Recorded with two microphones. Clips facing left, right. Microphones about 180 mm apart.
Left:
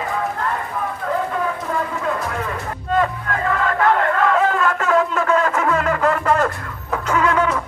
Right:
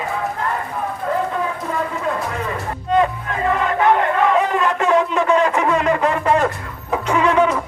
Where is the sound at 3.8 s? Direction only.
20° right (ahead or behind).